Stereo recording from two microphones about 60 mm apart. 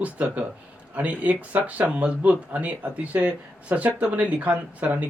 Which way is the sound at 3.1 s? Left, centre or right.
Right.